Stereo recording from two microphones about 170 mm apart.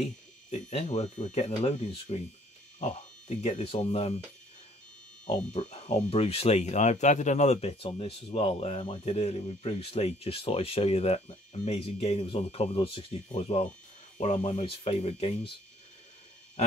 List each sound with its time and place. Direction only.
0.0 s speech: 40° left (ahead or behind)
5.5 s speech: 45° left (ahead or behind)